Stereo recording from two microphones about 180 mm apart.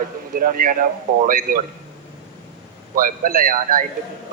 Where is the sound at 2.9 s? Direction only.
50° right (ahead or behind).